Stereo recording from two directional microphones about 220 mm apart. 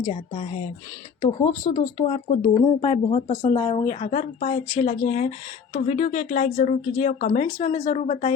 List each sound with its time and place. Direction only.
0.0 s speech: 30° left (ahead or behind)